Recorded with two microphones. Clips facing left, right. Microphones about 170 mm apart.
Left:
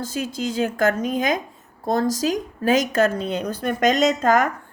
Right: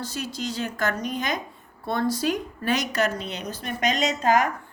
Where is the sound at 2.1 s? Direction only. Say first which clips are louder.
Left 3 dB; 90° left.